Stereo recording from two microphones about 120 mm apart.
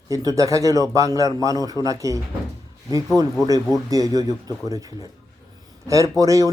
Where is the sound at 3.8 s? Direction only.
30° right (ahead or behind).